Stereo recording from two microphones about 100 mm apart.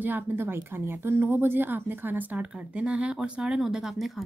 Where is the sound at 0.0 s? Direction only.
20° right (ahead or behind).